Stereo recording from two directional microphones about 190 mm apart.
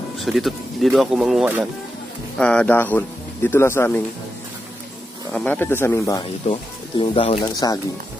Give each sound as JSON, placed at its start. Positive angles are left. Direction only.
{"t": 0.2, "sound": "speech", "side_deg": 0}
{"t": 5.3, "sound": "speech", "side_deg": 10}
{"t": 6.4, "sound": "speech", "side_deg": 30}